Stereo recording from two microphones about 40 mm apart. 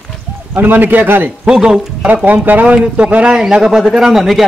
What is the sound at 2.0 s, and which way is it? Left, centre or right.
Speech, right.